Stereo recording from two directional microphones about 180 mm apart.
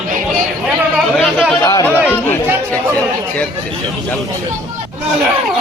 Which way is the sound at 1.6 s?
20° left (ahead or behind).